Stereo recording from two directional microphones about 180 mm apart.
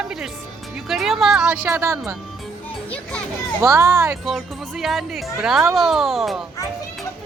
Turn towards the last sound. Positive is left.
turn(degrees=0)  # may be behind; listen again after turning